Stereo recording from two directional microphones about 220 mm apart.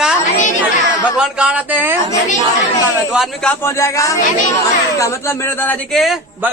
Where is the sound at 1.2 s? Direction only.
5° right (ahead or behind).